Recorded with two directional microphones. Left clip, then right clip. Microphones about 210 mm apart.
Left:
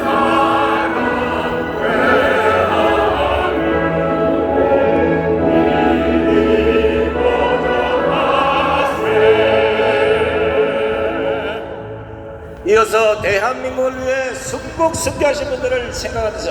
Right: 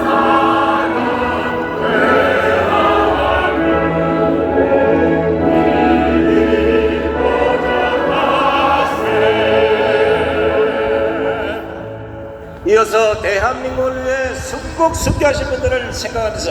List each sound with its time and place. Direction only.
0.0 s music: 10° left (ahead or behind)
12.6 s a sound: 25° left (ahead or behind)
15.0 s a man's voice: 20° left (ahead or behind)